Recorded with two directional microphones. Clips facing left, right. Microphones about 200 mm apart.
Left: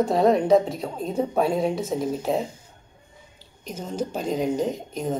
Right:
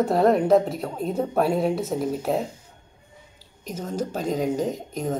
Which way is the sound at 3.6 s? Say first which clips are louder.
Right 1 dB; centre (ahead or behind).